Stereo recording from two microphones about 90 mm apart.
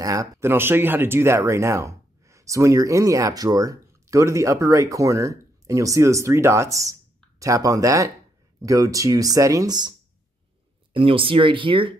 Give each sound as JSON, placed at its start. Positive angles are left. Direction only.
{"t": 0.0, "sound": "speech", "side_deg": -40}
{"t": 0.4, "sound": "speech", "side_deg": -25}
{"t": 10.9, "sound": "speech", "side_deg": -80}